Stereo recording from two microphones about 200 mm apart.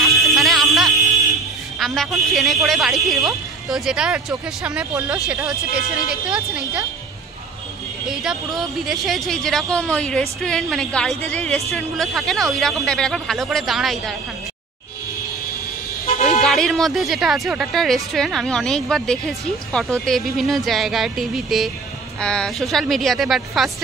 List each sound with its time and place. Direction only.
0.0 s music: centre (ahead or behind)
1.8 s a woman's voice: centre (ahead or behind)
8.1 s a woman's voice: 5° right (ahead or behind)
16.4 s a woman's voice: centre (ahead or behind)